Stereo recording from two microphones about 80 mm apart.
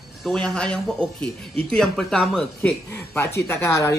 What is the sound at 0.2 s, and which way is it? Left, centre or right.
Speech, centre.